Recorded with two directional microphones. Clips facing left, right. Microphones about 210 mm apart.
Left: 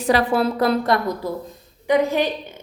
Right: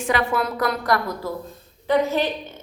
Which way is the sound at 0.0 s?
35° left (ahead or behind).